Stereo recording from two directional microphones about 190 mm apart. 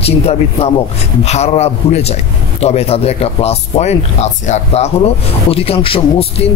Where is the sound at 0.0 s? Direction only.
30° left (ahead or behind).